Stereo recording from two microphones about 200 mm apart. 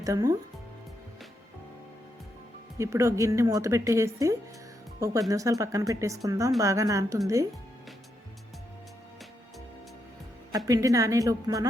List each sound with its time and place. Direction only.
0.0 s a woman's voice: 20° right (ahead or behind)
2.7 s a woman's voice: 15° right (ahead or behind)
10.7 s a woman's voice: 15° right (ahead or behind)